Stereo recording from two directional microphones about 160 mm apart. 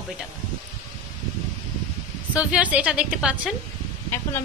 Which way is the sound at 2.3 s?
5° right (ahead or behind).